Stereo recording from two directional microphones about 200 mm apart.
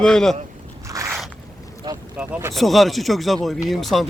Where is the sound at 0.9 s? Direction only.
15° right (ahead or behind).